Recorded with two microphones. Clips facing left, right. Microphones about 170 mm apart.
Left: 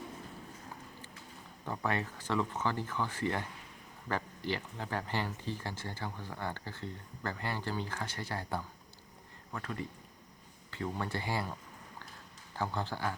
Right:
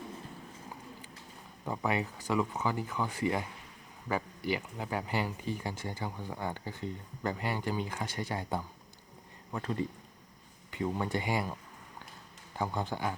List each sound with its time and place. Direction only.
1.6 s speech: 10° right (ahead or behind)
12.5 s speech: 15° right (ahead or behind)